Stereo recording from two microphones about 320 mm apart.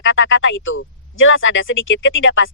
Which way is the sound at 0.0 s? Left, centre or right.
Left.